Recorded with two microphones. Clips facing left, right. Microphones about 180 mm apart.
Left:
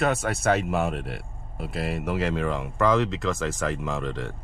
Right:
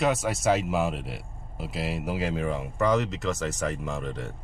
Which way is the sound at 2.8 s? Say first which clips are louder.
Left 2 dB; 90° left.